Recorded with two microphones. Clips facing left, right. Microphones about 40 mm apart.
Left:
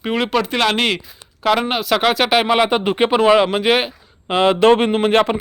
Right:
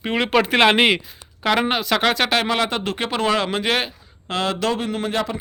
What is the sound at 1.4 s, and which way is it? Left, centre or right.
Speech, centre.